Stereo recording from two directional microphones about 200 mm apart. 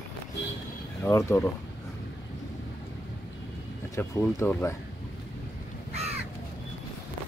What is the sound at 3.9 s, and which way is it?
Speech, 10° left (ahead or behind).